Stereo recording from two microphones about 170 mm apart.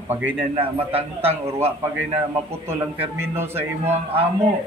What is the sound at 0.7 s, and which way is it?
Speech, 35° right (ahead or behind).